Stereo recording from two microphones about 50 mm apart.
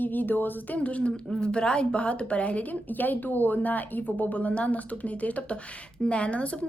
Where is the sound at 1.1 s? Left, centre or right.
Centre.